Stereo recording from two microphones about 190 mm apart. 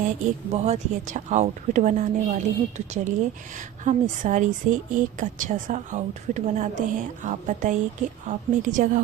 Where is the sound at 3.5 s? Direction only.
40° right (ahead or behind).